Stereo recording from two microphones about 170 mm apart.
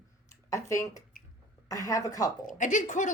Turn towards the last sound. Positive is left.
turn(degrees=45)  # may be behind; listen again after turning